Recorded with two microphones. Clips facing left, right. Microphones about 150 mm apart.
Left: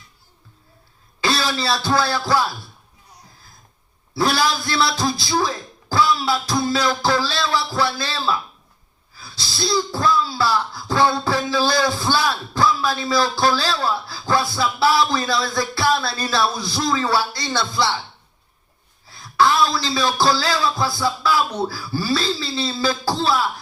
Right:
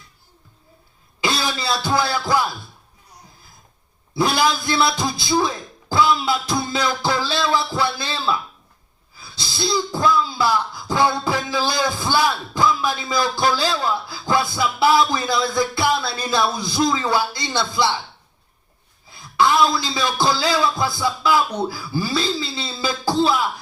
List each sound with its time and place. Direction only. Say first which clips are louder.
1.2 s throat clearing: left 2 dB; 15° right (ahead or behind)
2.0 s music: right 1 dB; 15° right (ahead or behind)
4.1 s a man's voice: right 1 dB; 20° right (ahead or behind)
19.0 s a man's voice: left 1 dB; 20° right (ahead or behind)